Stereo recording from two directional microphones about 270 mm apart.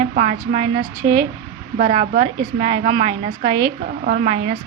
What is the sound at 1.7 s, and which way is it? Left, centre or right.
A woman's voice, right.